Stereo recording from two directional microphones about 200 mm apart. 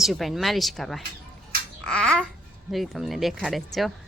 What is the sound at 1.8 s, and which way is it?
Babbling, 5° left (ahead or behind).